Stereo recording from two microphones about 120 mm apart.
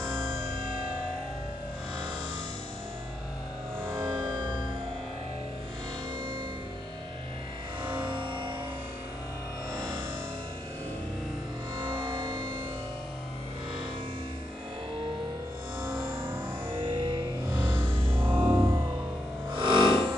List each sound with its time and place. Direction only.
0.2 s music: 45° right (ahead or behind)
3.9 s music: 45° right (ahead or behind)
7.8 s music: 45° right (ahead or behind)
11.8 s music: 45° right (ahead or behind)
15.8 s music: 20° right (ahead or behind)
16.1 s music: 45° right (ahead or behind)
18.5 s music: 25° right (ahead or behind)
19.5 s music: 45° right (ahead or behind)